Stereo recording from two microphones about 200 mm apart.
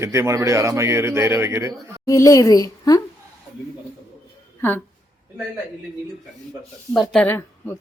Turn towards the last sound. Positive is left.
turn(degrees=10)  # may be behind; listen again after turning